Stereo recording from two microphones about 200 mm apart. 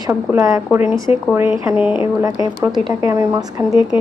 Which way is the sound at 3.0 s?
15° right (ahead or behind).